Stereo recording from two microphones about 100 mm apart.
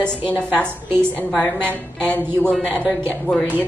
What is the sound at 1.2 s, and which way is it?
A woman's voice, 10° left (ahead or behind).